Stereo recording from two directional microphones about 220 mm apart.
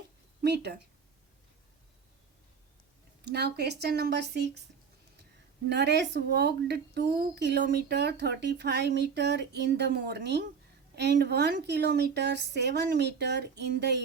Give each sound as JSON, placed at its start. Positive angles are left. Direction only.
{"t": 0.4, "sound": "speech", "side_deg": -50}
{"t": 3.2, "sound": "speech", "side_deg": -45}
{"t": 5.6, "sound": "speech", "side_deg": -50}